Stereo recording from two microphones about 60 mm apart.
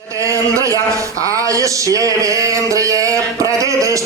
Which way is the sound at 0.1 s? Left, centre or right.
Right.